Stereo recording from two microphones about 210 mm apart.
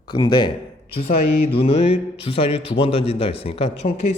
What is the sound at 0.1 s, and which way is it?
Speech, 20° left (ahead or behind).